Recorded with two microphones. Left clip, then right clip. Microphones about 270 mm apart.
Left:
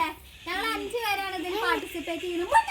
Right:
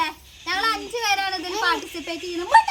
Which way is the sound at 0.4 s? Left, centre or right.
Centre.